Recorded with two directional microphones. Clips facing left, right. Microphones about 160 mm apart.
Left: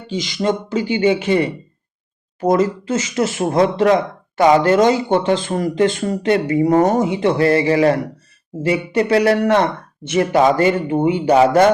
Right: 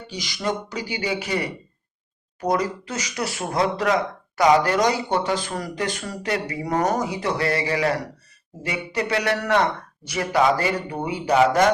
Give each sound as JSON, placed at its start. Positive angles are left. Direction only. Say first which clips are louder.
{"t": 0.1, "sound": "a man's voice", "louder": "left 8 dB", "side_deg": 20}